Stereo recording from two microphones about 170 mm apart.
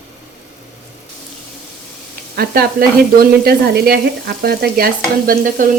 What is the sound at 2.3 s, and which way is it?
A woman's voice, 65° right (ahead or behind).